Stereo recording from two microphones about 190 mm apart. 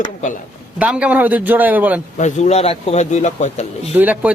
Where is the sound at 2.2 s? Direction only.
35° left (ahead or behind).